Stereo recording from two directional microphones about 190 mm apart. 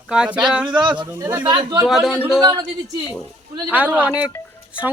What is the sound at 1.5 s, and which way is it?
Speech, 25° right (ahead or behind).